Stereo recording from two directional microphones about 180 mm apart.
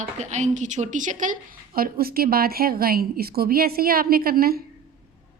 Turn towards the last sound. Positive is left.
turn(degrees=-55)  # may be behind; listen again after turning